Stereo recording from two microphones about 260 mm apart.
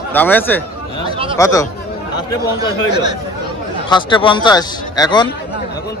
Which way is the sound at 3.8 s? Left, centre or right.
Centre.